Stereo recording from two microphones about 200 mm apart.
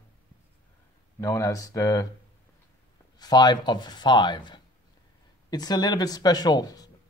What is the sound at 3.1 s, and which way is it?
Speech, 20° left (ahead or behind).